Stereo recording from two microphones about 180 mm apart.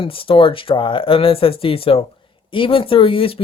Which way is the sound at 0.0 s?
30° left (ahead or behind).